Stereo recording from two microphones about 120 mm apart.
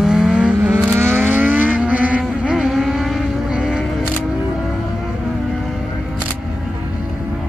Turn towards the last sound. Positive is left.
turn(degrees=0)  # may be behind; listen again after turning